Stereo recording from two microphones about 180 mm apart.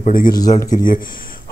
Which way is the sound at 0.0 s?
50° left (ahead or behind).